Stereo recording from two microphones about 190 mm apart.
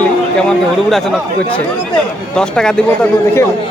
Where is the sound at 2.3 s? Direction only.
5° left (ahead or behind).